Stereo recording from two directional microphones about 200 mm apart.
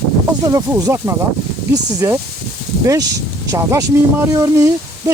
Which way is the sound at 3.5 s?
15° right (ahead or behind).